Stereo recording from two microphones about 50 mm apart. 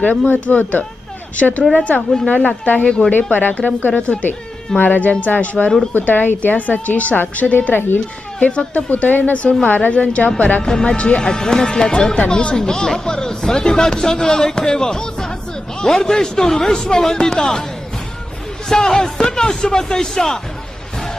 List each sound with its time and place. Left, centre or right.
0.3 s a woman's voice: left
2.8 s speech: centre
3.1 s a woman's voice: left
4.8 s a woman's voice: left
8.4 s a woman's voice: left
10.6 s a woman's voice: centre
18.7 s speech: centre